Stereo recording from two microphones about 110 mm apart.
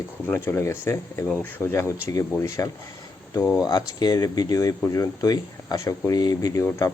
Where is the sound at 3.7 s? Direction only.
35° left (ahead or behind).